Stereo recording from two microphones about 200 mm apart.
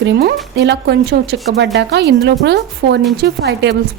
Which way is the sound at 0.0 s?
55° right (ahead or behind).